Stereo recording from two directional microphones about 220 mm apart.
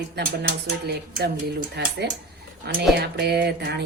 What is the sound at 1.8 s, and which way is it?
Speech, 50° right (ahead or behind).